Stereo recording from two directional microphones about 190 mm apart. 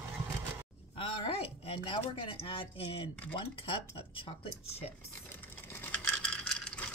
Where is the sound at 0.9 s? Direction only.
30° left (ahead or behind).